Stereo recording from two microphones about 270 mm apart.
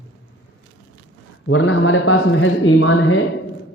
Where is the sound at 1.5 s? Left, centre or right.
Left.